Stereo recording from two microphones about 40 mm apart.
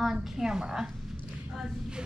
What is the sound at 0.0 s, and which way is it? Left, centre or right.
A woman's voice, centre.